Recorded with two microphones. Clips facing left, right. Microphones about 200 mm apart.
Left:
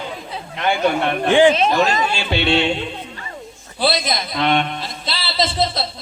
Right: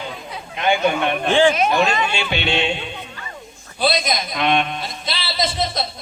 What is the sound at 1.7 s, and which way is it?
Speech, 40° left (ahead or behind).